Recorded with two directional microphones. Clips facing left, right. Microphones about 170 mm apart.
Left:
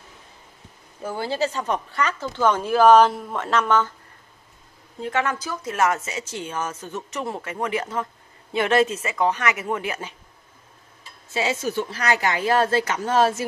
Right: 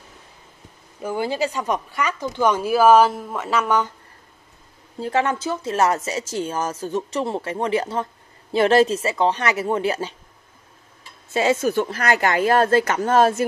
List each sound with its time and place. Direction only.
1.0 s speech: 15° right (ahead or behind)
5.0 s speech: 30° right (ahead or behind)
11.3 s speech: 50° right (ahead or behind)